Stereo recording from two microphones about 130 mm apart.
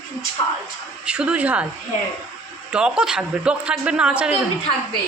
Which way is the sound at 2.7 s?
5° right (ahead or behind).